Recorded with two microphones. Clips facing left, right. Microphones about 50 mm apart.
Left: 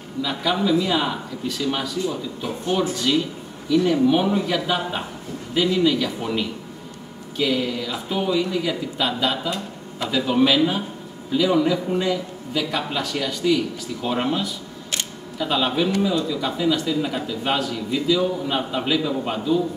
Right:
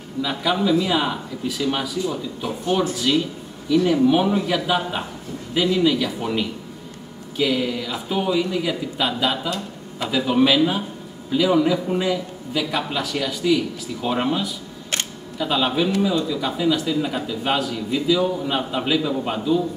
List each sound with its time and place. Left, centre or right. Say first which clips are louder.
0.2 s a man's voice: right 1 dB; centre
14.9 s camera: right 2 dB; right
15.3 s a man's voice: right 1 dB; centre